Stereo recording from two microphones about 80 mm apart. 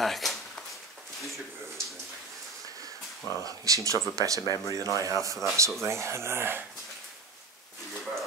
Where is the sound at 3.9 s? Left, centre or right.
Right.